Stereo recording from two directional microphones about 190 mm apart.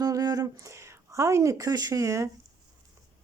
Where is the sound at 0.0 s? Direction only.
20° right (ahead or behind).